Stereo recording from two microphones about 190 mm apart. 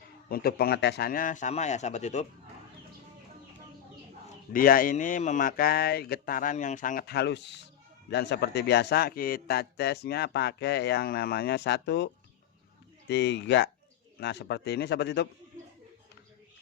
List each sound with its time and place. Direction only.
0.3 s speech: 50° left (ahead or behind)
4.5 s a man's voice: 50° left (ahead or behind)